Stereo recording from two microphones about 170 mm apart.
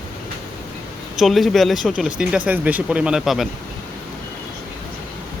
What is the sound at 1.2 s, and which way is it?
Speech, centre (ahead or behind).